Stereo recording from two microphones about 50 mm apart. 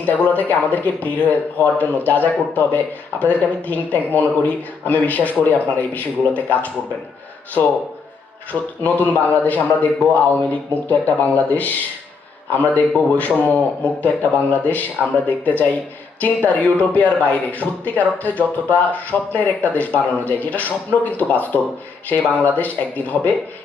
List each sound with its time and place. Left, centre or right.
0.0 s speech: left
8.8 s speech: left
22.4 s speech: left